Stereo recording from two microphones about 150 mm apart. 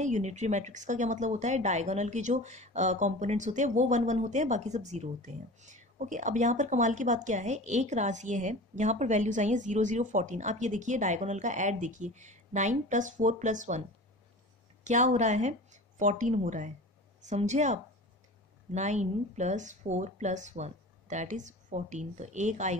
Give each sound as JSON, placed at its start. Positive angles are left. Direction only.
{"t": 0.0, "sound": "speech", "side_deg": -50}